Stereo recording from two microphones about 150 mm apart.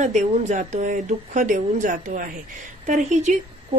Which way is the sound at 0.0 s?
55° right (ahead or behind).